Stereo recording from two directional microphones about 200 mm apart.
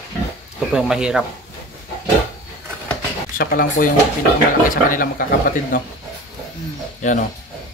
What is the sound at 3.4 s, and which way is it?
Speech, 45° left (ahead or behind).